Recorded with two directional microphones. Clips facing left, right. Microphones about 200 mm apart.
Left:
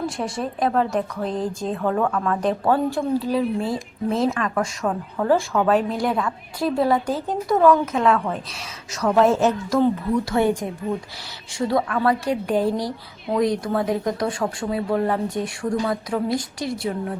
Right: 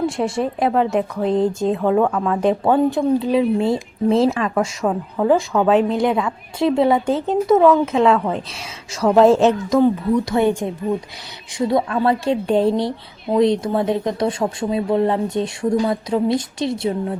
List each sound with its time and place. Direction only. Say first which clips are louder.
0.0 s speech: right 6 dB; 25° right (ahead or behind)
1.9 s a woman's voice: right 2 dB; 15° right (ahead or behind)
4.9 s a woman's voice: right 3 dB; 10° right (ahead or behind)